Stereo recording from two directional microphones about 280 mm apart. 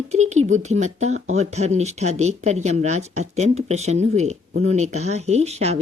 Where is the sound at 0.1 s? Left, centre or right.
Right.